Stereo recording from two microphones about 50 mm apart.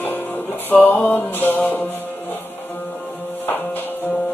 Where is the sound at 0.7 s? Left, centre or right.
Left.